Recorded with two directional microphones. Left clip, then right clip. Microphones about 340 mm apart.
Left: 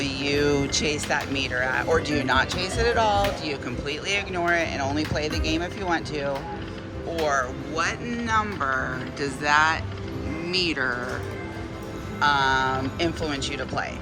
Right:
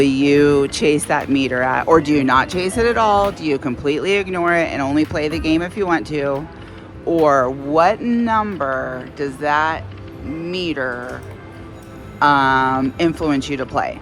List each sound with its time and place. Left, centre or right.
0.0 s speech: centre
7.8 s speech: centre
12.2 s speech: centre